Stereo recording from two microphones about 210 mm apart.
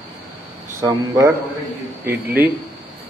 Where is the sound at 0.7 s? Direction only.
15° right (ahead or behind).